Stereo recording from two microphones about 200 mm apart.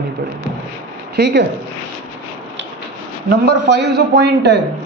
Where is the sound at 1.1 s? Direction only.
55° right (ahead or behind).